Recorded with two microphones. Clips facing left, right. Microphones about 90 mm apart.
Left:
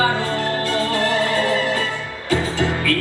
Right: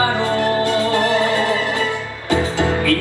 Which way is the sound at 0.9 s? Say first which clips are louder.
Right 3 dB; 20° right (ahead or behind).